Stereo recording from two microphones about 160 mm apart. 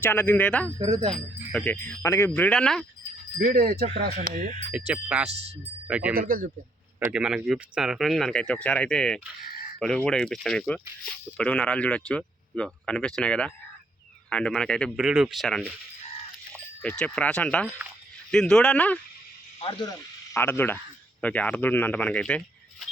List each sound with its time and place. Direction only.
0.0 s speech: 10° left (ahead or behind)
0.9 s speech: 40° right (ahead or behind)
1.1 s speech: 5° left (ahead or behind)
3.3 s speech: 70° right (ahead or behind)
4.9 s speech: 10° right (ahead or behind)
5.3 s speech: 40° right (ahead or behind)
5.9 s speech: 10° right (ahead or behind)
6.1 s a man's voice: 60° right (ahead or behind)
7.1 s speech: 5° right (ahead or behind)
16.8 s speech: 10° left (ahead or behind)
19.6 s speech: 25° left (ahead or behind); by 22.9 s 5° left (ahead or behind)